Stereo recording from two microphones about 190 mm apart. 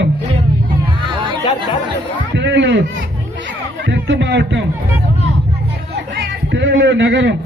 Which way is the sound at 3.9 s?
65° right (ahead or behind).